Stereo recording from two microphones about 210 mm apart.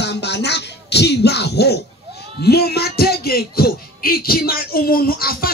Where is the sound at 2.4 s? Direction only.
50° left (ahead or behind).